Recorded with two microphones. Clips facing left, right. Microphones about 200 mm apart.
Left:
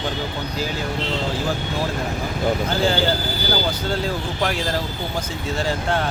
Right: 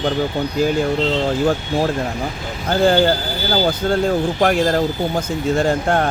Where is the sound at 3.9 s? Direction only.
55° right (ahead or behind).